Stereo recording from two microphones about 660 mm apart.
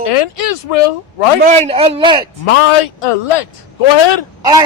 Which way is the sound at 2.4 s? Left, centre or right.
Left.